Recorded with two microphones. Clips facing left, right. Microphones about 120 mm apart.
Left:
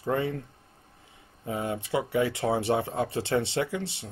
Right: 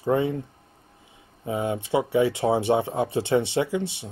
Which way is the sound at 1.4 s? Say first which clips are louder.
Right 4 dB; 20° right (ahead or behind).